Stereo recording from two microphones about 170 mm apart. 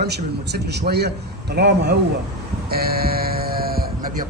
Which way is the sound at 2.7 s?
65° right (ahead or behind).